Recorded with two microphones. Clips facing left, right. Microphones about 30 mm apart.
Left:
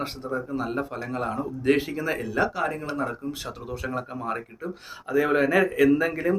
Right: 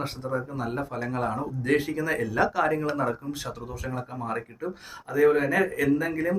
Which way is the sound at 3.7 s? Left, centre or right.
Left.